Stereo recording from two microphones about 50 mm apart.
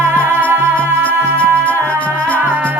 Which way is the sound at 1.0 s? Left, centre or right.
Left.